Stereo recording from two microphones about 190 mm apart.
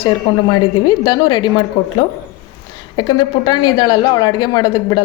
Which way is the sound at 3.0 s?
25° left (ahead or behind).